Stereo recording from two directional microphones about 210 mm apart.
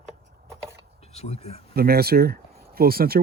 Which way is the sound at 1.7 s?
45° right (ahead or behind).